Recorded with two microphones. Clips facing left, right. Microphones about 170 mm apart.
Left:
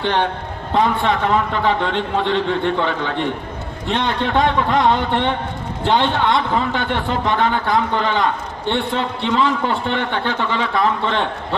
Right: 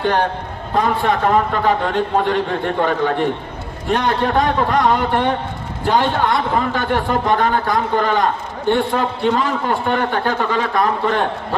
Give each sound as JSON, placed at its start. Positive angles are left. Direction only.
{"t": 0.7, "sound": "a man's voice", "side_deg": -45}